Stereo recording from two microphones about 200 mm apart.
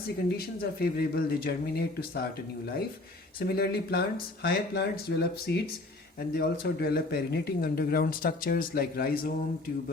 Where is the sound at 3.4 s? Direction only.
50° left (ahead or behind).